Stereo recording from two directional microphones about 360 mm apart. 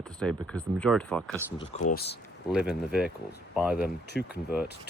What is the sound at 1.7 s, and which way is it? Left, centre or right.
Speech, left.